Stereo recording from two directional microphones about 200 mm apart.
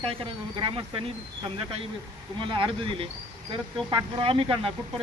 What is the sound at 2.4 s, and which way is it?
Speech, 25° right (ahead or behind).